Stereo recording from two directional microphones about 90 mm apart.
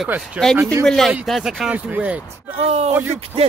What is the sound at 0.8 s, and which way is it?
Speech, 5° left (ahead or behind).